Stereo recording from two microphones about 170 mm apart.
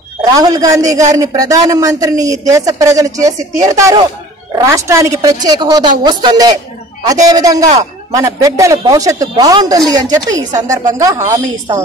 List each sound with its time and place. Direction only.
0.2 s a woman's voice: 20° right (ahead or behind)